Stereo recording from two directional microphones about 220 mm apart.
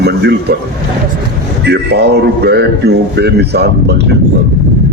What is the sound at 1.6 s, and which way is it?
A man's voice, 50° right (ahead or behind).